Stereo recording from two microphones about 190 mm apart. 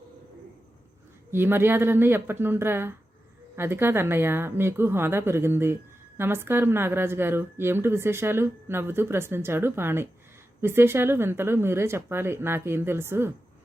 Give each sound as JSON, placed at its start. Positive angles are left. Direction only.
{"t": 1.3, "sound": "a woman's voice", "side_deg": -10}